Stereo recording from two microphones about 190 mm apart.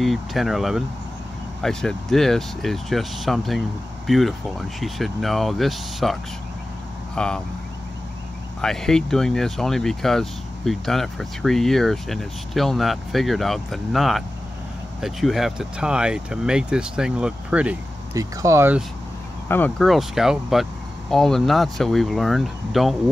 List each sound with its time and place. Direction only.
0.0 s speech: centre (ahead or behind)
7.2 s speech: 5° left (ahead or behind)
8.5 s speech: 5° left (ahead or behind); by 18.8 s 15° right (ahead or behind)
19.4 s speech: 10° left (ahead or behind)
19.8 s speech: centre (ahead or behind)